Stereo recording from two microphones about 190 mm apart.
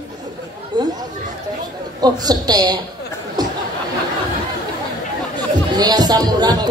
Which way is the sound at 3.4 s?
20° right (ahead or behind).